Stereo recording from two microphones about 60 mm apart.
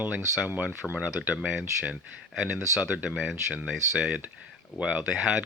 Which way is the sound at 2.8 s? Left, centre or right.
Right.